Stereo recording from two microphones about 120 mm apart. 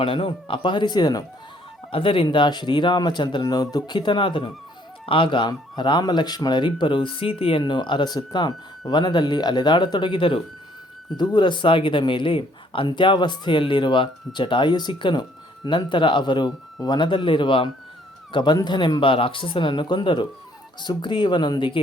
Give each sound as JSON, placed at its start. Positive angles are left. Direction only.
{"t": 0.0, "sound": "speech", "side_deg": 50}
{"t": 1.9, "sound": "speech", "side_deg": 50}